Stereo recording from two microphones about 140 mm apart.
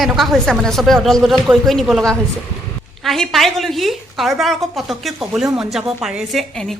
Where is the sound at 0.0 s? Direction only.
Centre (ahead or behind).